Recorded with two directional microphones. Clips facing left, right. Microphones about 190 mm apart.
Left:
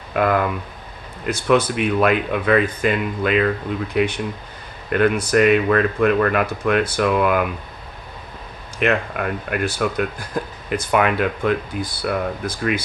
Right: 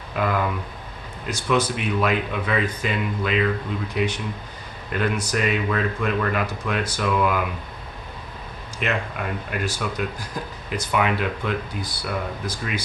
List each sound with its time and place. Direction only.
0.1 s speech: 55° left (ahead or behind)
8.8 s speech: 60° left (ahead or behind)